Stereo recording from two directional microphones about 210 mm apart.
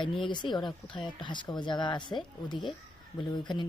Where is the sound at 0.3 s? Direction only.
20° left (ahead or behind).